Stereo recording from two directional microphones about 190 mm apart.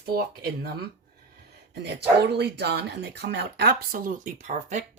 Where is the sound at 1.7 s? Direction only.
60° right (ahead or behind); by 4.8 s 35° right (ahead or behind).